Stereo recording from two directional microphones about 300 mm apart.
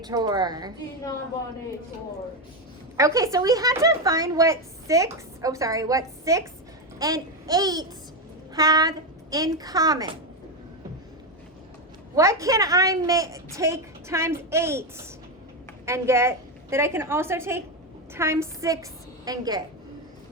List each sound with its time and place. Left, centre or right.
0.0 s a woman's voice: centre
3.0 s a woman's voice: centre
12.1 s a woman's voice: centre